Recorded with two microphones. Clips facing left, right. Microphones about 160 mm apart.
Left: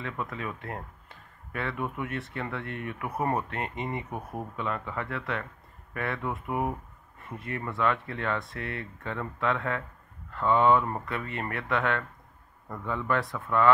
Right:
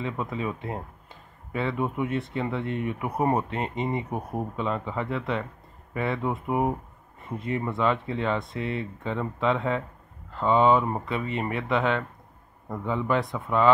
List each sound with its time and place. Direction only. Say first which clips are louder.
0.0 s speech: right 5 dB; 20° right (ahead or behind)